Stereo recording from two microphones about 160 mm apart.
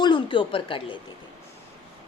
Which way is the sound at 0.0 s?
30° left (ahead or behind).